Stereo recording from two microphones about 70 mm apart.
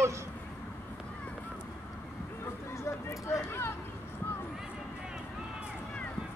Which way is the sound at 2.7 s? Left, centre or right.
Left.